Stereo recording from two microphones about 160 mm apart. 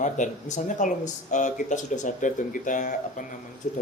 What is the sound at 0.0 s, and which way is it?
A man's voice, 50° left (ahead or behind).